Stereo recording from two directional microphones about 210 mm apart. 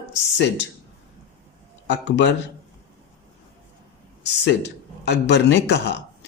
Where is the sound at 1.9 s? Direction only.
60° left (ahead or behind).